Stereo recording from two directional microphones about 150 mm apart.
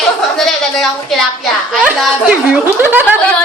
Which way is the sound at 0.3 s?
Centre (ahead or behind).